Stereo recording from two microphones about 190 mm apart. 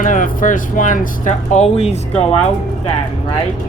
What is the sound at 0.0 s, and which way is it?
Speech, 45° left (ahead or behind).